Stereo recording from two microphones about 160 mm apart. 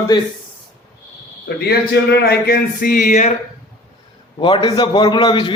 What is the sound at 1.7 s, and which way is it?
Speech, 90° left.